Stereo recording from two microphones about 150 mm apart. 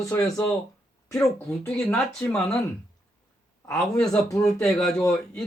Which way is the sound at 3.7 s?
5° left (ahead or behind).